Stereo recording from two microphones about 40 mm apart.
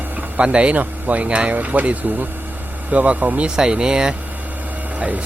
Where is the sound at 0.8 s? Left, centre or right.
Right.